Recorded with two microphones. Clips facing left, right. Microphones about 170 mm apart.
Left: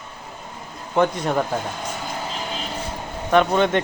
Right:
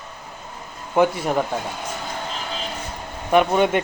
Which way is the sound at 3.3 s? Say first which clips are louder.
Even; 10° right (ahead or behind).